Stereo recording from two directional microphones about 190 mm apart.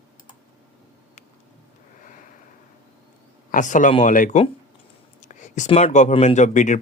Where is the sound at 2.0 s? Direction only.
45° left (ahead or behind).